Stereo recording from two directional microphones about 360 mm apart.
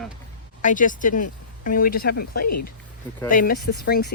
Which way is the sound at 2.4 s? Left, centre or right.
Left.